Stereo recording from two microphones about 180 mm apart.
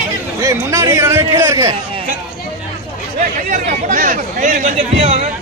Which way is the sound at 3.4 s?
45° right (ahead or behind).